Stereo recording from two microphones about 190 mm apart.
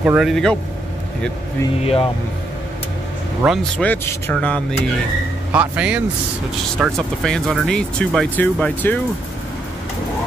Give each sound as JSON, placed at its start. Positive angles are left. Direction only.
{"t": 0.0, "sound": "speech", "side_deg": -5}
{"t": 1.8, "sound": "speech", "side_deg": 30}
{"t": 3.4, "sound": "speech", "side_deg": 0}
{"t": 5.5, "sound": "speech", "side_deg": -5}